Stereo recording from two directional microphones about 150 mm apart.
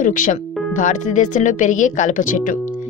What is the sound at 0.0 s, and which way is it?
Speech, 60° left (ahead or behind).